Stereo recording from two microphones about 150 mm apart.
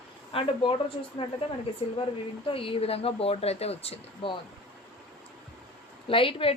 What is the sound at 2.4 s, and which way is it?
A woman's voice, 35° left (ahead or behind).